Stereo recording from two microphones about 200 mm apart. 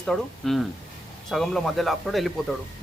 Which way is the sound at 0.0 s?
Centre (ahead or behind).